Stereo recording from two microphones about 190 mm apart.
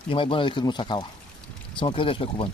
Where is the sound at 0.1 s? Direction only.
25° left (ahead or behind).